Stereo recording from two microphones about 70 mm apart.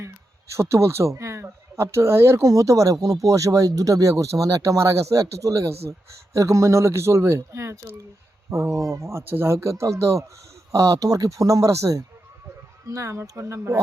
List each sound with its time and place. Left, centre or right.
0.5 s speech: right